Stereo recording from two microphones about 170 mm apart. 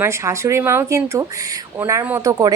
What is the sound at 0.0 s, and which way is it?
A woman's voice, 15° right (ahead or behind).